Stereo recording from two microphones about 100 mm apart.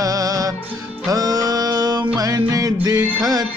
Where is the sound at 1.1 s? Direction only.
40° right (ahead or behind).